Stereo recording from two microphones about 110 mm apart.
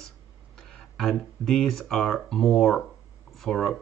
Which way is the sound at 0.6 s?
5° left (ahead or behind).